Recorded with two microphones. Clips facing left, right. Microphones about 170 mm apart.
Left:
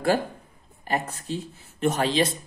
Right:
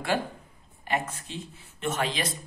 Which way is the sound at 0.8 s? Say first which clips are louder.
Left 3 dB; 40° left (ahead or behind).